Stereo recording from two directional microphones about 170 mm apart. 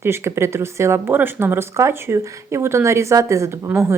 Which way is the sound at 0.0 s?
15° right (ahead or behind).